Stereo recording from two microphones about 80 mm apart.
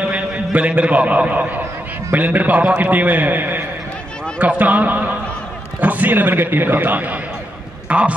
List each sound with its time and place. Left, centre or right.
0.1 s a man's voice: centre